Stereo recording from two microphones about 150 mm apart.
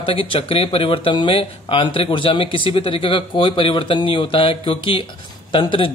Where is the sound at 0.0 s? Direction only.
35° left (ahead or behind).